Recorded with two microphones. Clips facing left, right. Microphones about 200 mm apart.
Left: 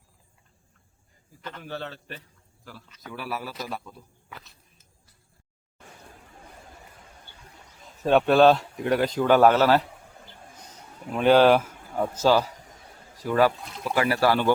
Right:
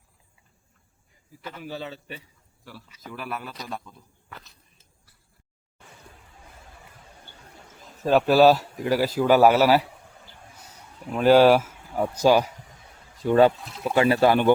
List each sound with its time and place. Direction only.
1.4 s a man's voice: 10° right (ahead or behind)
8.0 s speech: 5° right (ahead or behind)
11.1 s a man's voice: 5° right (ahead or behind)
13.2 s speech: 25° right (ahead or behind)
13.6 s speech: centre (ahead or behind)
13.8 s speech: 25° right (ahead or behind)